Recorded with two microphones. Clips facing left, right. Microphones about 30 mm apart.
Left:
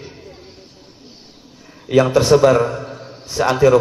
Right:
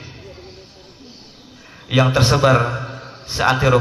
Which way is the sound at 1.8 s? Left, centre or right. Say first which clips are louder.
Left 4 dB; right.